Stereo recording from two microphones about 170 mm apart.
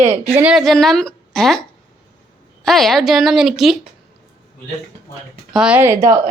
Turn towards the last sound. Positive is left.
turn(degrees=-15)  # may be behind; listen again after turning